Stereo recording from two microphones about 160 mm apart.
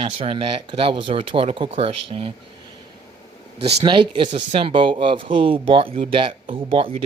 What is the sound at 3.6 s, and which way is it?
Speech, 40° right (ahead or behind).